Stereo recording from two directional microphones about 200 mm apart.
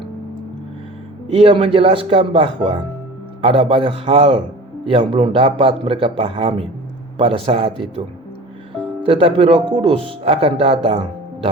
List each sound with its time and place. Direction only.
1.3 s speech: 30° right (ahead or behind)
9.0 s speech: 25° right (ahead or behind)